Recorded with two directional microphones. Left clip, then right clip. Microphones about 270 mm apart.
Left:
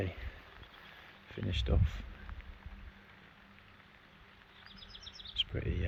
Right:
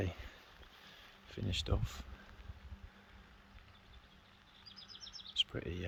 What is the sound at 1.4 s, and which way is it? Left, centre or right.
Speech, centre.